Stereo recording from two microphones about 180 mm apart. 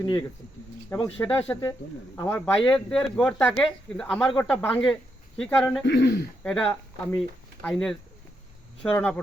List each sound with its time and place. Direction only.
0.0 s speech: 25° left (ahead or behind)
1.2 s speech: 10° left (ahead or behind)
5.8 s speech: 70° left (ahead or behind)
6.4 s speech: 5° left (ahead or behind)